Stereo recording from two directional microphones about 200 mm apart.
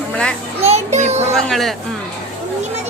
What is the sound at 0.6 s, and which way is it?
Child singing, 35° right (ahead or behind).